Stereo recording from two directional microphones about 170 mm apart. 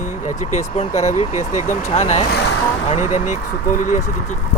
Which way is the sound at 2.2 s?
70° left (ahead or behind).